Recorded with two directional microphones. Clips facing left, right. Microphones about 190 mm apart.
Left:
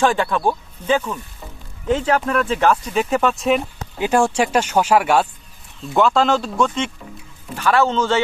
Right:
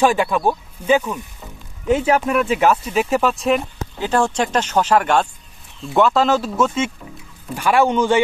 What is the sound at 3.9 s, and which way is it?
Speech, 10° left (ahead or behind).